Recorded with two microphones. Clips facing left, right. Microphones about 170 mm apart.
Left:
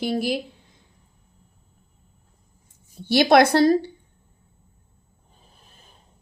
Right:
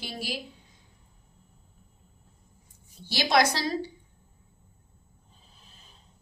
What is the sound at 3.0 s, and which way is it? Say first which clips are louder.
Speech: left 9 dB; 55° left (ahead or behind).